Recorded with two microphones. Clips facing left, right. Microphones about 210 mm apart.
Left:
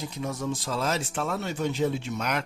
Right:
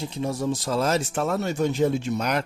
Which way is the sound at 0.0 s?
30° right (ahead or behind).